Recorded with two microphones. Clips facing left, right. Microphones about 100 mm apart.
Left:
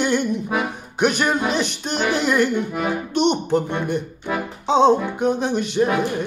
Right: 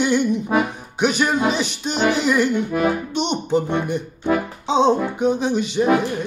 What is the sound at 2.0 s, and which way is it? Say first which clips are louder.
Music: right 1 dB; 10° right (ahead or behind).